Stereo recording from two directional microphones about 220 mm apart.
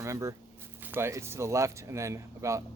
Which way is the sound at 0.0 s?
15° right (ahead or behind).